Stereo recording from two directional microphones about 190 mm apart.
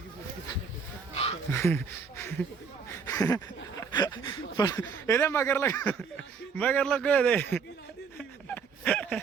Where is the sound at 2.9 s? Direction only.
15° left (ahead or behind).